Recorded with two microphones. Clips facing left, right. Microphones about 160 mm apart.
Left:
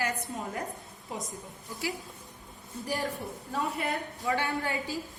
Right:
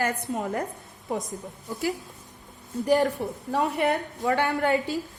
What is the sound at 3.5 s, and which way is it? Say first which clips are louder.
A woman's voice: right 7 dB; 75° right (ahead or behind).